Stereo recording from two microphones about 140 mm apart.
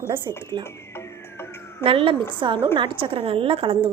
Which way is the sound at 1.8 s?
40° right (ahead or behind).